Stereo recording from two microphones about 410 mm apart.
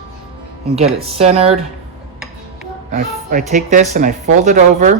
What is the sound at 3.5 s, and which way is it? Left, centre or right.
Speech, centre.